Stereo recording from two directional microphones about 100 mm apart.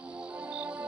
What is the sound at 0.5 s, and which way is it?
Music, 15° right (ahead or behind).